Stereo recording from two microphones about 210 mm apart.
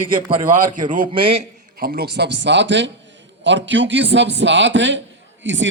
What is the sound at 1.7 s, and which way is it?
A man's voice, 45° right (ahead or behind).